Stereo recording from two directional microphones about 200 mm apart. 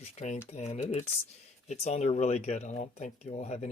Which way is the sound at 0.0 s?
35° left (ahead or behind).